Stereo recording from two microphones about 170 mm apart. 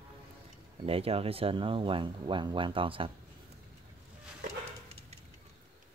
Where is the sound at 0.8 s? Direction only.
35° right (ahead or behind).